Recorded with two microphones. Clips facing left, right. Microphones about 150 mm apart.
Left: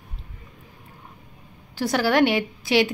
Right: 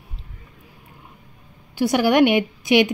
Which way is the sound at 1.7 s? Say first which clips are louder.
Right 4 dB; 15° right (ahead or behind).